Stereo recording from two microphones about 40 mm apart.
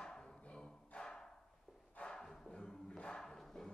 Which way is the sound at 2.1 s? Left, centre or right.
Centre.